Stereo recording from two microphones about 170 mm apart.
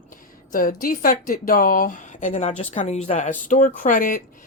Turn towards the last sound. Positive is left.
turn(degrees=55)  # may be behind; listen again after turning